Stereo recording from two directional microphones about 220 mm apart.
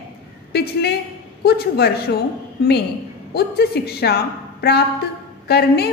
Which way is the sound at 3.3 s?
45° left (ahead or behind).